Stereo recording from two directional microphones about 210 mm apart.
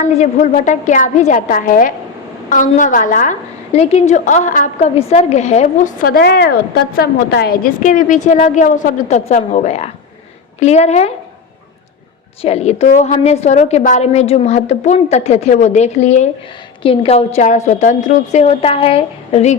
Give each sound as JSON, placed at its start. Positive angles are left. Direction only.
{"t": 0.0, "sound": "a woman's voice", "side_deg": 35}
{"t": 12.4, "sound": "a woman's voice", "side_deg": 30}